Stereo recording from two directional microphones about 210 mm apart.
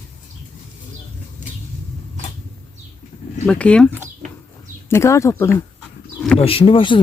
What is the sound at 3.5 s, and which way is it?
Speech, 5° left (ahead or behind).